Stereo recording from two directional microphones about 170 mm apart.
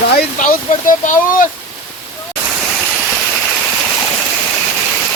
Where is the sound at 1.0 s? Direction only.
50° left (ahead or behind).